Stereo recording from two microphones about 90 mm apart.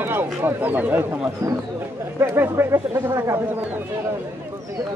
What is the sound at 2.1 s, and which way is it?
Speech, 25° right (ahead or behind).